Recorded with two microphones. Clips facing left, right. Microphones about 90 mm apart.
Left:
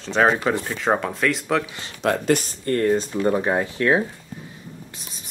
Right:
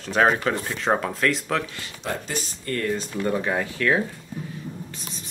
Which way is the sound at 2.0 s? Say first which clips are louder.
Left 10 dB; 65° left (ahead or behind).